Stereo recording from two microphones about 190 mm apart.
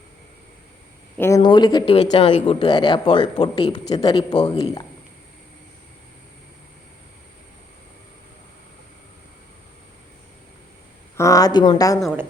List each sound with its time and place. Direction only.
1.2 s speech: 20° left (ahead or behind)
11.2 s speech: 15° left (ahead or behind)